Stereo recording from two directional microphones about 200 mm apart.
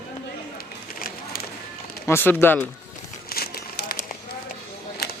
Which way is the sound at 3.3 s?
50° left (ahead or behind).